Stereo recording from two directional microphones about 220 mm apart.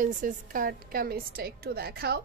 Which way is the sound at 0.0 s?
40° right (ahead or behind).